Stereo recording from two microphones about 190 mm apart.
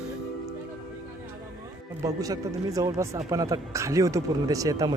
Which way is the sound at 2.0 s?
15° right (ahead or behind).